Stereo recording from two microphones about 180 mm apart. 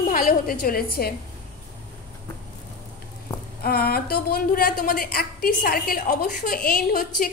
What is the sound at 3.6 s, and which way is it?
A woman's voice, 55° left (ahead or behind).